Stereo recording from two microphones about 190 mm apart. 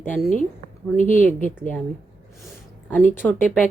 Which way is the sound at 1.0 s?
45° left (ahead or behind).